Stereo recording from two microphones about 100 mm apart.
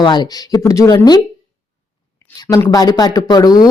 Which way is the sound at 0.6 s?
35° left (ahead or behind).